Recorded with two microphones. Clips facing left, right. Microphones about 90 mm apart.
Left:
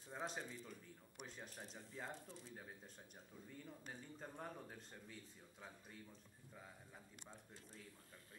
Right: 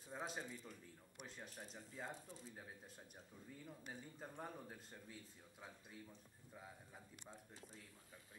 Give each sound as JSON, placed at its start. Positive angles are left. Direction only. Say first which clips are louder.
{"t": 0.1, "sound": "a man's voice", "louder": "even", "side_deg": -5}
{"t": 3.6, "sound": "speech", "louder": "right 3 dB", "side_deg": -5}